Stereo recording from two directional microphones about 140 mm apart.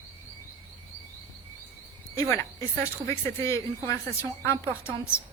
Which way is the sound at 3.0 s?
20° left (ahead or behind).